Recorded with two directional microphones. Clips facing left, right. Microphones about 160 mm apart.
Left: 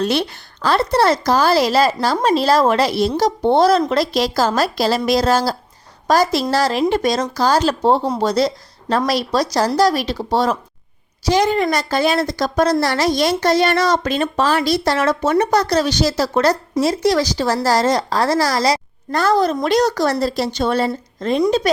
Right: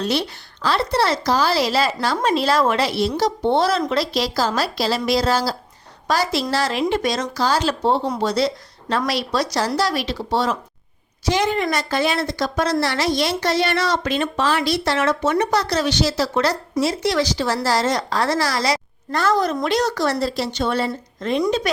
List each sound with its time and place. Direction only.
0.0 s a woman's voice: 55° left (ahead or behind); by 21.4 s 40° left (ahead or behind)